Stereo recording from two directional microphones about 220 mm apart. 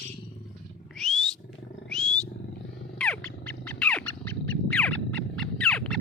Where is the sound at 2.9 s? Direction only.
5° left (ahead or behind).